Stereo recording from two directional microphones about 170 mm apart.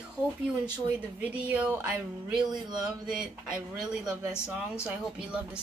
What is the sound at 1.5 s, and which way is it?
Music, 10° right (ahead or behind).